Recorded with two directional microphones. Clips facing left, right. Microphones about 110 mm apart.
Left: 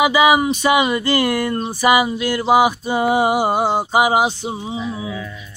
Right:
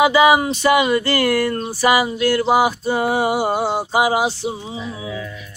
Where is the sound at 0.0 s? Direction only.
15° left (ahead or behind).